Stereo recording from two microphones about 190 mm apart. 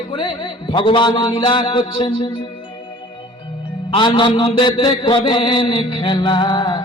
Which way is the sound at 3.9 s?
25° left (ahead or behind).